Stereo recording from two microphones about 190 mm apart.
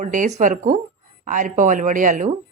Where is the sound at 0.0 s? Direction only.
40° right (ahead or behind).